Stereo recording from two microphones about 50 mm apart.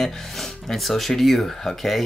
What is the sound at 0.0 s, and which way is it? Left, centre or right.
Speech, centre.